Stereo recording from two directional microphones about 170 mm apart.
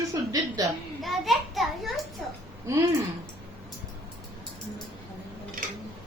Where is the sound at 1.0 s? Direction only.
Centre (ahead or behind).